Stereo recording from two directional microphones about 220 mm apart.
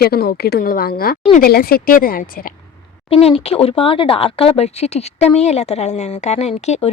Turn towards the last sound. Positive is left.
turn(degrees=30)  # may be behind; listen again after turning